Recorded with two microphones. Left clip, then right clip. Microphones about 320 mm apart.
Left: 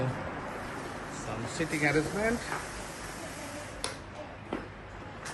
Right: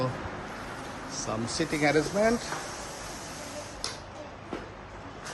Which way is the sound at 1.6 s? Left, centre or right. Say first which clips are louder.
Right 3 dB; centre.